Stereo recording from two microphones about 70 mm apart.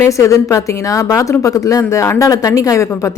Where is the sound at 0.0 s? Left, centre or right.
Left.